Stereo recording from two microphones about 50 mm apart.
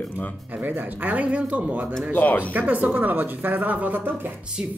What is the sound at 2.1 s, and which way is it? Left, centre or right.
Speech, left.